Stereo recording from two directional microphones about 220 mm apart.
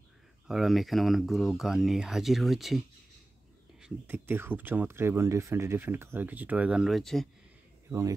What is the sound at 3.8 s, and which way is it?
Speech, 10° right (ahead or behind).